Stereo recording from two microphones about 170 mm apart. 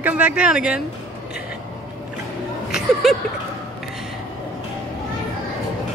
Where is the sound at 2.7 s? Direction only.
Centre (ahead or behind).